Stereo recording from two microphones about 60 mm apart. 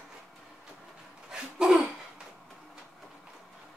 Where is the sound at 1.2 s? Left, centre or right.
Centre.